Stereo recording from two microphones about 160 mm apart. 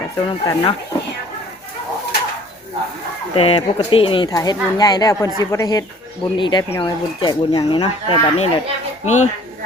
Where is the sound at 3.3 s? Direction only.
35° left (ahead or behind).